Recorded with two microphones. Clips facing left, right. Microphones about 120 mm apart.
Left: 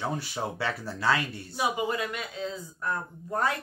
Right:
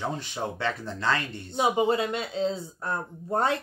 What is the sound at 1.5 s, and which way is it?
Speech, 25° right (ahead or behind).